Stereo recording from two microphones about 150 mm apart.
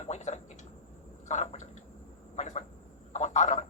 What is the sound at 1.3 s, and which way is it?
Speech, 50° left (ahead or behind).